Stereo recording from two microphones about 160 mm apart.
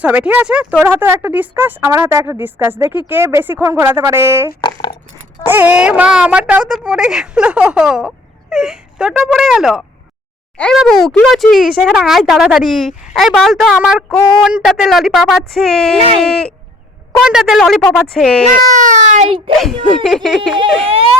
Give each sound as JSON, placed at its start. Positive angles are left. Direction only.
{"t": 0.0, "sound": "speech", "side_deg": -10}
{"t": 4.6, "sound": "speech", "side_deg": 30}
{"t": 5.5, "sound": "speech", "side_deg": -10}
{"t": 17.1, "sound": "speech", "side_deg": -5}
{"t": 18.7, "sound": "speech", "side_deg": -50}
{"t": 19.5, "sound": "speech", "side_deg": 0}